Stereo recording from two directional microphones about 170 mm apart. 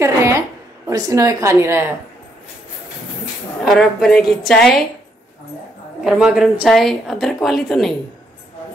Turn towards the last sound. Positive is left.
turn(degrees=0)  # may be behind; listen again after turning